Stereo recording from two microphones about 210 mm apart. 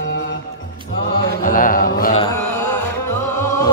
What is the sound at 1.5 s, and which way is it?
Mantra, 40° left (ahead or behind).